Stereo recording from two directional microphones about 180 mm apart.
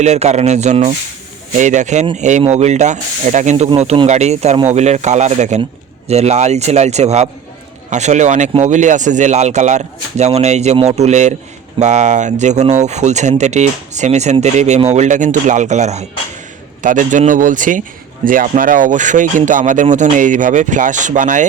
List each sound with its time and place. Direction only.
0.0 s speech: 40° right (ahead or behind)